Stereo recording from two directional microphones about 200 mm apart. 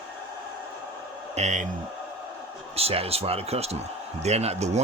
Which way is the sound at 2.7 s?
30° right (ahead or behind).